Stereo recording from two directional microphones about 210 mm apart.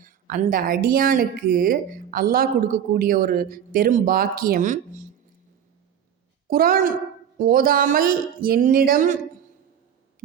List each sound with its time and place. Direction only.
0.0 s speech: 40° right (ahead or behind)
6.5 s speech: 45° right (ahead or behind)